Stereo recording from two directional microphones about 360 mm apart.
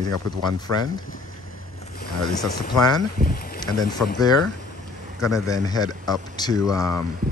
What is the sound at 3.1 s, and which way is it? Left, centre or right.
Speech, left.